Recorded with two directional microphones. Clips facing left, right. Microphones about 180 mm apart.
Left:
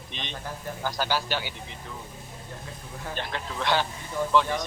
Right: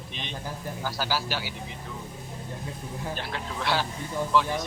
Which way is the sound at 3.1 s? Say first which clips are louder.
Left 1 dB; 5° right (ahead or behind).